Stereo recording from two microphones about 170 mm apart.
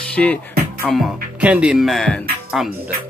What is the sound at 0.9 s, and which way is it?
Music, 5° right (ahead or behind).